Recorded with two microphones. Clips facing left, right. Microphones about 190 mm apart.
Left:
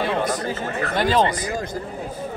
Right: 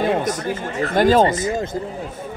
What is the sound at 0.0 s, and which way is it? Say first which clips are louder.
Chatter: right 3 dB; 45° right (ahead or behind).